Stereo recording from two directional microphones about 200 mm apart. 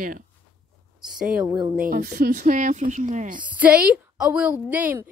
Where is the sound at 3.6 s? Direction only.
5° right (ahead or behind).